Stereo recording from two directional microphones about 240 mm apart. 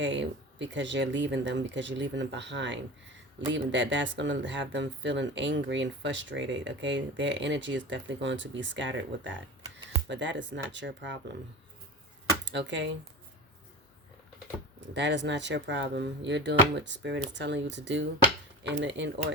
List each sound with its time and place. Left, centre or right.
0.0 s speech: right
12.5 s speech: right
14.9 s speech: right